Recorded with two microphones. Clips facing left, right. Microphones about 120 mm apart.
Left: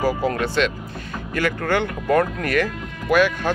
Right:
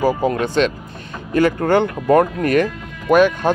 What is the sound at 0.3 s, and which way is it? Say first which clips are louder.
Speech: right 4 dB; 25° right (ahead or behind).